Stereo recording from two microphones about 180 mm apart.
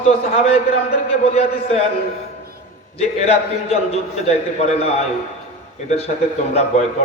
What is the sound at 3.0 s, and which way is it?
A man's voice, 35° left (ahead or behind).